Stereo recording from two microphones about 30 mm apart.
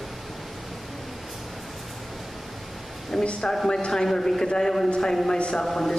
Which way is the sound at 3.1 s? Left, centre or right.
Centre.